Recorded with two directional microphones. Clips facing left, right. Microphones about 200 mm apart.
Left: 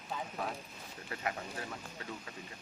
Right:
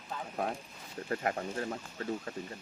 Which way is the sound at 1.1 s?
45° right (ahead or behind).